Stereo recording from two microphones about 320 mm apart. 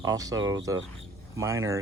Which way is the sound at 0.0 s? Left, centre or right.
Centre.